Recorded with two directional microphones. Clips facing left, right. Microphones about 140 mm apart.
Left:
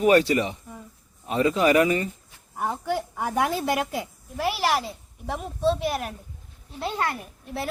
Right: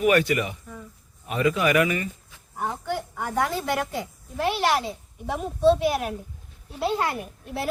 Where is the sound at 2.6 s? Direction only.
10° left (ahead or behind).